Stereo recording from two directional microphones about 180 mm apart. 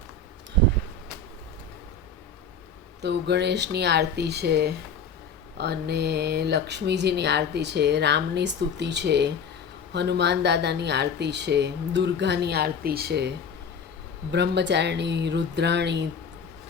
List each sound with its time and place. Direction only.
3.0 s speech: 70° right (ahead or behind)